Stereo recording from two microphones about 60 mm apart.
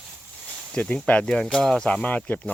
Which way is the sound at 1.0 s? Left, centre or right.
Centre.